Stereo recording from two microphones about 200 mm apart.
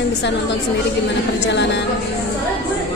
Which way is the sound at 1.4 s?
60° left (ahead or behind).